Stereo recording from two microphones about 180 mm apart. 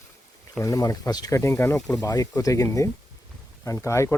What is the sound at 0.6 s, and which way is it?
Speech, 20° left (ahead or behind).